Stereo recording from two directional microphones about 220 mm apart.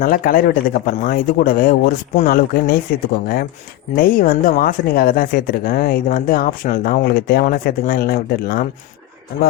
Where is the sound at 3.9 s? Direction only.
40° left (ahead or behind).